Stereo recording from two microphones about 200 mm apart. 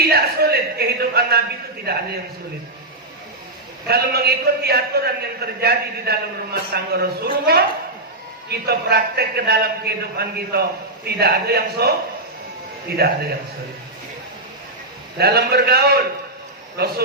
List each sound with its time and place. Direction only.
0.0 s a man's voice: 50° right (ahead or behind)
3.8 s a man's voice: 50° right (ahead or behind)
8.4 s a man's voice: 50° right (ahead or behind)
13.0 s a man's voice: 55° right (ahead or behind)
15.2 s a man's voice: 50° right (ahead or behind)